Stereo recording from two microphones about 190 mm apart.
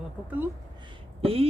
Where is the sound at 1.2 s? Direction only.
30° right (ahead or behind).